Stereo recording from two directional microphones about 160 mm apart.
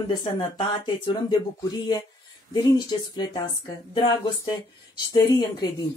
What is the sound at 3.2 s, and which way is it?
Speech, 25° left (ahead or behind).